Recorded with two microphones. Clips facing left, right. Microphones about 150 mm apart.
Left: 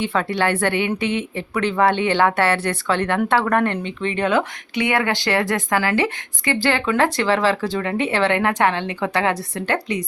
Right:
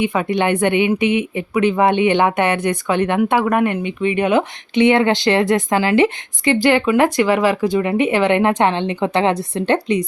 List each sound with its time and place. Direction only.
0.0 s speech: 15° right (ahead or behind)